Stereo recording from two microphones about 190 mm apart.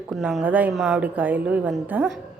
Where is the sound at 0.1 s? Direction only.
Centre (ahead or behind).